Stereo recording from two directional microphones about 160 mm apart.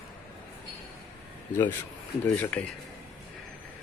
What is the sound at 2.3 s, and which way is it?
Speech, 10° left (ahead or behind).